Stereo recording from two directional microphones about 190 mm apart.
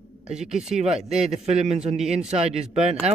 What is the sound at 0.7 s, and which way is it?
A man's voice, 35° right (ahead or behind).